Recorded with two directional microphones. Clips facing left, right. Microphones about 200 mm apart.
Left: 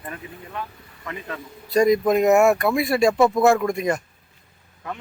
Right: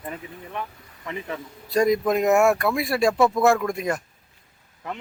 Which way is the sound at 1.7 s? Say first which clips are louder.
Left 3 dB; centre (ahead or behind).